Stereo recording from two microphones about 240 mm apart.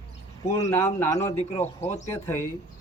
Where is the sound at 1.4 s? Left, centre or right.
Left.